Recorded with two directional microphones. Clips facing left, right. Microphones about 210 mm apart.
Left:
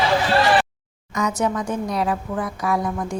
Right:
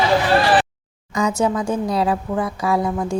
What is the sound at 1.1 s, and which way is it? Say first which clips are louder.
A woman's voice: right 3 dB; 30° right (ahead or behind).